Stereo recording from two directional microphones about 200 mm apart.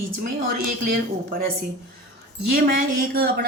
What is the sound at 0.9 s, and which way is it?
Speech, 50° right (ahead or behind).